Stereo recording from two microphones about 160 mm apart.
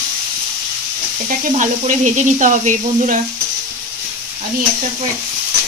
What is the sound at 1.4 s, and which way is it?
Speech, 50° right (ahead or behind).